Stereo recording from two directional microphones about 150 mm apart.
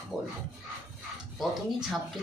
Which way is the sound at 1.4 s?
Centre (ahead or behind).